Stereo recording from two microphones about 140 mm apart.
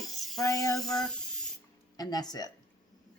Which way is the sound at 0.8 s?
5° left (ahead or behind).